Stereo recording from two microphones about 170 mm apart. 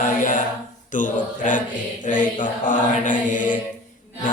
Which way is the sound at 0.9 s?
50° left (ahead or behind).